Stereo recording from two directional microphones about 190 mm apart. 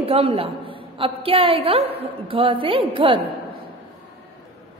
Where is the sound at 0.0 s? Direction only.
30° right (ahead or behind).